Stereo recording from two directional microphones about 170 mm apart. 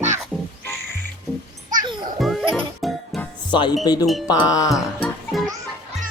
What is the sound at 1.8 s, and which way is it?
Music, 25° right (ahead or behind).